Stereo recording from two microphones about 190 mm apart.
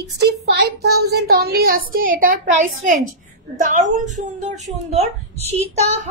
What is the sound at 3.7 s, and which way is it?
A woman's voice, 40° right (ahead or behind).